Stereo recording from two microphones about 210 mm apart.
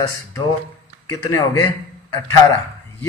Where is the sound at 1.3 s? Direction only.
15° left (ahead or behind).